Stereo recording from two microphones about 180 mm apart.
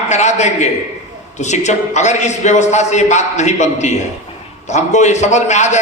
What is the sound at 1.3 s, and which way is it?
A man's voice, 40° left (ahead or behind).